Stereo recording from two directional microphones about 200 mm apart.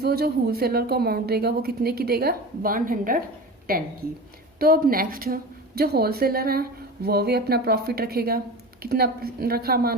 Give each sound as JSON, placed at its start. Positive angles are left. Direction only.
{"t": 0.0, "sound": "a woman's voice", "side_deg": -50}